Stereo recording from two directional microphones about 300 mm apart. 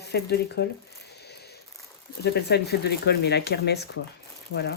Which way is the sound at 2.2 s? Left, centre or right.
Left.